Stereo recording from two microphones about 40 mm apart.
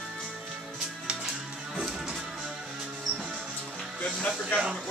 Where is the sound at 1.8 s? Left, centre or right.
Centre.